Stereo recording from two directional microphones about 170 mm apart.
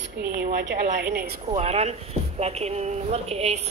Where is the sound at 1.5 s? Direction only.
40° right (ahead or behind).